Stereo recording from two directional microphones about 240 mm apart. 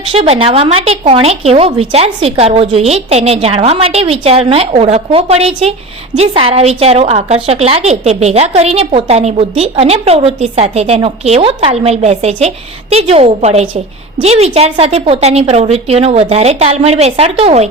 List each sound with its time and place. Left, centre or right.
0.1 s a woman's voice: right